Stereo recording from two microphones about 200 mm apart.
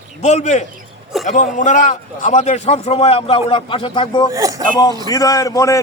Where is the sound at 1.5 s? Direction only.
40° left (ahead or behind).